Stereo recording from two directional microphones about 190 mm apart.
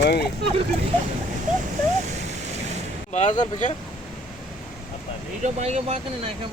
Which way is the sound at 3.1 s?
40° left (ahead or behind).